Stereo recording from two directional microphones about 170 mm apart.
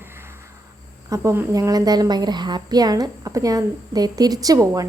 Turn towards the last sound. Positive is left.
turn(degrees=-20)  # may be behind; listen again after turning